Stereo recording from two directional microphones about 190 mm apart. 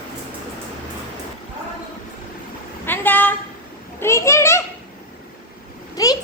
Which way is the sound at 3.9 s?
15° left (ahead or behind).